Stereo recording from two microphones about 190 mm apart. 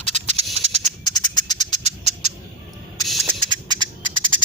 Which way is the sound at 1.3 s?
20° left (ahead or behind).